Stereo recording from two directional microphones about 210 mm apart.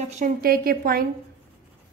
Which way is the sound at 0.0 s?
40° right (ahead or behind).